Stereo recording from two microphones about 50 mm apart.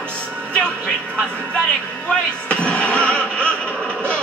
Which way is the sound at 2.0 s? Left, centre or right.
Left.